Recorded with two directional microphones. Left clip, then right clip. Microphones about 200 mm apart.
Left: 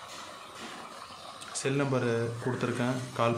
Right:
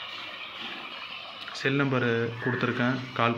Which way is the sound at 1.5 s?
Centre (ahead or behind).